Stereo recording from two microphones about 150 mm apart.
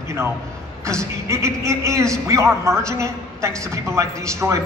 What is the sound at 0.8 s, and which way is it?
A man's voice, 20° right (ahead or behind).